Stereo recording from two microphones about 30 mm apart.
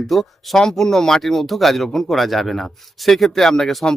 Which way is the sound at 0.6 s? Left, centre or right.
Centre.